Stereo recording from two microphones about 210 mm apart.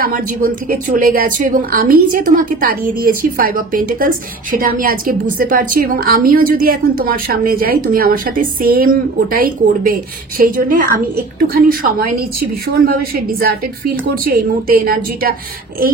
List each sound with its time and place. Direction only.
0.0 s a woman's voice: 45° right (ahead or behind)